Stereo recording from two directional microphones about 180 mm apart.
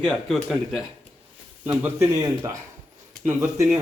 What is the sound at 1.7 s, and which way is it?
Speech, 15° right (ahead or behind).